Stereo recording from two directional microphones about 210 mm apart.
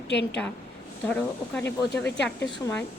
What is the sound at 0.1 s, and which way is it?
Speech, 55° left (ahead or behind).